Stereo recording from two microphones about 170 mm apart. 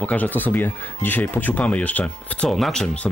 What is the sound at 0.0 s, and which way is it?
Speech, 10° left (ahead or behind).